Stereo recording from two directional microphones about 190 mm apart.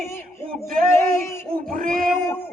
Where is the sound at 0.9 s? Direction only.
15° left (ahead or behind).